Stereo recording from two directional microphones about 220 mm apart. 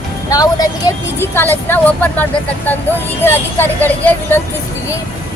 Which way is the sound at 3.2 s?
10° left (ahead or behind).